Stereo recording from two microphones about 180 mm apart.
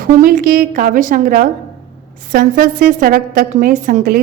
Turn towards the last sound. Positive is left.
turn(degrees=-50)  # may be behind; listen again after turning